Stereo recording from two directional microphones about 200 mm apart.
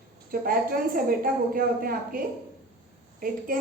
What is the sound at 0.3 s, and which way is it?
A woman's voice, 45° right (ahead or behind).